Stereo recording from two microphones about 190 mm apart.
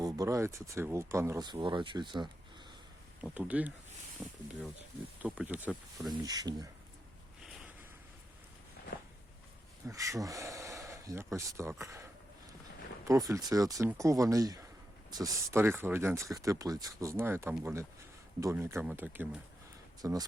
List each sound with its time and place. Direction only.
0.0 s speech: 15° right (ahead or behind)
3.2 s speech: 5° right (ahead or behind)
6.2 s speech: 20° right (ahead or behind)
9.8 s speech: 15° right (ahead or behind)
13.1 s speech: 15° right (ahead or behind)